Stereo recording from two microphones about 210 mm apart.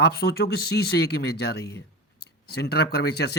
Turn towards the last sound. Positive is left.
turn(degrees=50)  # may be behind; listen again after turning